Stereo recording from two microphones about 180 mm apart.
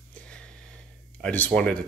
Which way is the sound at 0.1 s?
5° left (ahead or behind).